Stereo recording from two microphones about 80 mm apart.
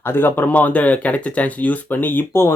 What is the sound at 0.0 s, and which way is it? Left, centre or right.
Speech, left.